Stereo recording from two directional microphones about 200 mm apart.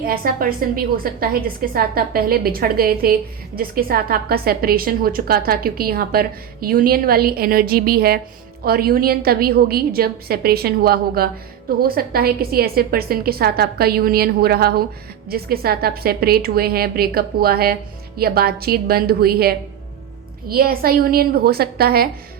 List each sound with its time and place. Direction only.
0.0 s a woman's voice: 45° right (ahead or behind)